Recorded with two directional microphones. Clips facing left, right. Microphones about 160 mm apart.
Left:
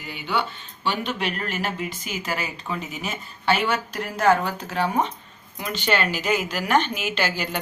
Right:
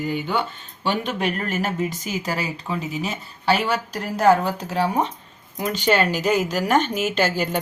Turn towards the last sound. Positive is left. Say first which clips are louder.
# right 4 dB
turn(degrees=-45)  # may be behind; listen again after turning